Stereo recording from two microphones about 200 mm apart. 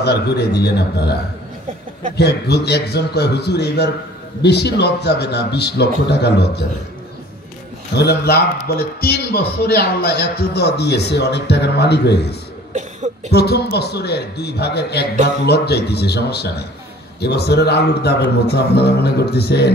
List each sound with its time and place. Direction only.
0.0 s a man's voice: 55° left (ahead or behind)
2.1 s a man's voice: 55° left (ahead or behind)
7.9 s a man's voice: 55° left (ahead or behind)